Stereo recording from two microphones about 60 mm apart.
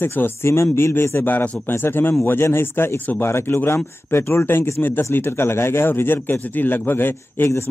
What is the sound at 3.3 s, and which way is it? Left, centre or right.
Speech, left.